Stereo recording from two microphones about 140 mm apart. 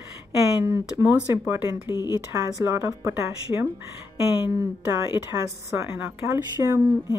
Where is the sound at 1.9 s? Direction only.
25° left (ahead or behind).